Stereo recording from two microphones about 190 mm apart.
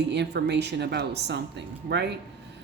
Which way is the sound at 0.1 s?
65° right (ahead or behind).